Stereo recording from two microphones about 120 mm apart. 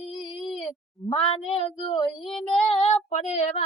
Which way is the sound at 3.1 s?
75° left (ahead or behind).